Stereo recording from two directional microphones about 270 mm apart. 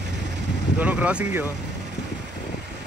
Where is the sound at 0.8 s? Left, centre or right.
Centre.